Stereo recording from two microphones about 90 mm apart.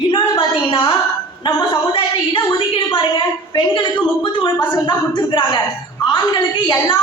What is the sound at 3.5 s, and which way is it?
A woman's voice, 60° left (ahead or behind).